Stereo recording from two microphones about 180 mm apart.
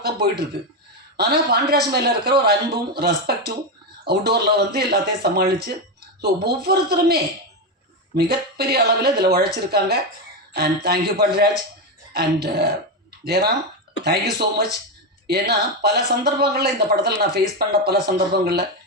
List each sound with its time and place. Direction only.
0.0 s a man's voice: 65° right (ahead or behind)